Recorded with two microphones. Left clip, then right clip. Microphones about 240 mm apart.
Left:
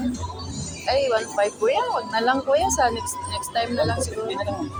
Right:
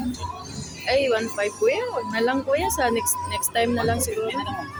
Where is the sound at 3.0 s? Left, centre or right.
Right.